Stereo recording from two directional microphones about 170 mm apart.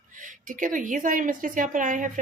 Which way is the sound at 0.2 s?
50° right (ahead or behind).